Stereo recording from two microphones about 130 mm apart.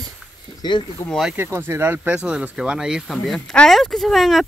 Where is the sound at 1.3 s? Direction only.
15° right (ahead or behind).